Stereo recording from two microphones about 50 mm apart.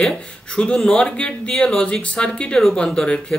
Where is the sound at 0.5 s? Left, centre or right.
Centre.